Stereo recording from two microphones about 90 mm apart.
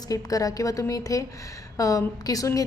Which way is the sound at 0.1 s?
40° left (ahead or behind).